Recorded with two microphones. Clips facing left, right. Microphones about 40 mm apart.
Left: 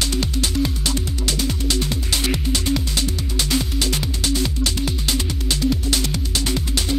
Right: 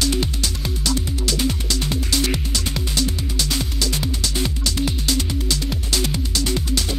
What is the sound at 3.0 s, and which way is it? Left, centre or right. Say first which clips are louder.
Music: even; left.